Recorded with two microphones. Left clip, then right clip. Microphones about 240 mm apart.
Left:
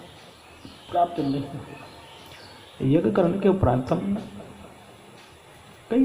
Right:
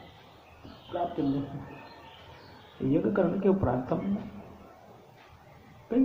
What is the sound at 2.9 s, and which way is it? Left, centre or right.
Speech, left.